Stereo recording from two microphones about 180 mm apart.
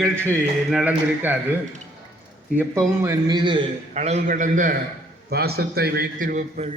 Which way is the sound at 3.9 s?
40° right (ahead or behind).